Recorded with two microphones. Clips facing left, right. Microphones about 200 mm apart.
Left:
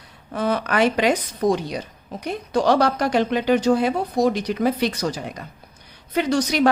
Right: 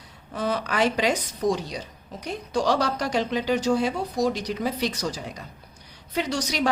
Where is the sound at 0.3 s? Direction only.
55° left (ahead or behind).